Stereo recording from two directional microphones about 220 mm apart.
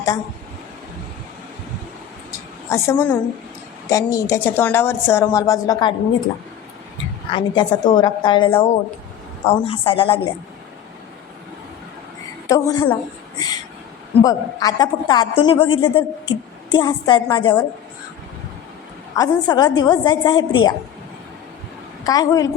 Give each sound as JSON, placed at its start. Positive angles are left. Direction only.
{"t": 2.6, "sound": "speech", "side_deg": 10}
{"t": 7.3, "sound": "a woman's voice", "side_deg": 20}
{"t": 12.5, "sound": "speech", "side_deg": 15}
{"t": 14.3, "sound": "a woman's voice", "side_deg": 15}
{"t": 19.1, "sound": "a woman's voice", "side_deg": 15}
{"t": 22.0, "sound": "a woman's voice", "side_deg": 15}